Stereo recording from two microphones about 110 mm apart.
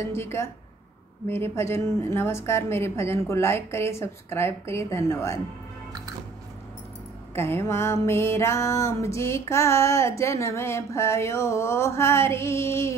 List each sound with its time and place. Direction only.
0.0 s music: 25° left (ahead or behind)
7.3 s music: 20° left (ahead or behind)